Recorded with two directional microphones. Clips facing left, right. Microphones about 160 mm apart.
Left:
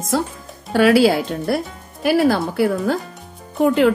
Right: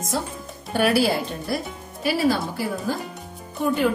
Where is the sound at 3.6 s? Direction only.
80° left.